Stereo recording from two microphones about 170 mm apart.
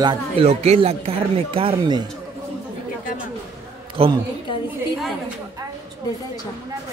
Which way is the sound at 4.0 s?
35° right (ahead or behind).